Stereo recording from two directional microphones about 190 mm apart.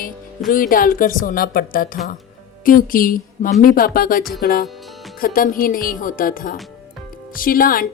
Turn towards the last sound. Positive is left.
turn(degrees=50)  # may be behind; listen again after turning